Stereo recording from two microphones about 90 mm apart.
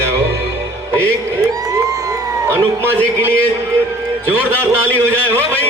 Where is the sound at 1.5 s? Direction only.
40° right (ahead or behind).